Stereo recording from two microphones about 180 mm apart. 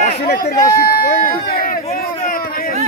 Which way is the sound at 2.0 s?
55° left (ahead or behind).